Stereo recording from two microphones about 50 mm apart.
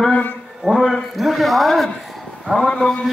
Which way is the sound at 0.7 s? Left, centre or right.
Centre.